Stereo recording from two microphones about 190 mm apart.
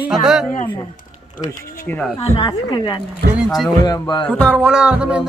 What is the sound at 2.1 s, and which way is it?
Speech, 30° left (ahead or behind).